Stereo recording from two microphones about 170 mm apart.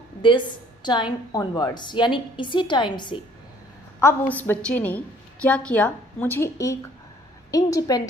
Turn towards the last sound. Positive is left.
turn(degrees=20)  # may be behind; listen again after turning